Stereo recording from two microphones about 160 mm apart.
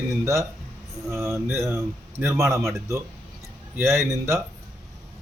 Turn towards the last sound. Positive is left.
turn(degrees=-20)  # may be behind; listen again after turning